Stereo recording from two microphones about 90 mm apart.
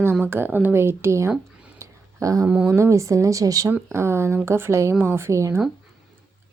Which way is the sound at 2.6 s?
30° right (ahead or behind).